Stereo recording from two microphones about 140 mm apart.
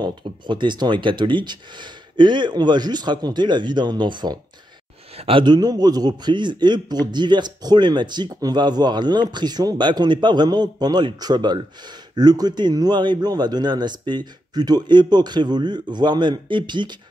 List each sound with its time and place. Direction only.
0.0 s a man's voice: 35° right (ahead or behind)